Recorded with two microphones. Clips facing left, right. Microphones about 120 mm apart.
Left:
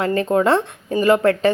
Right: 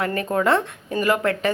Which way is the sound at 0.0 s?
30° left (ahead or behind).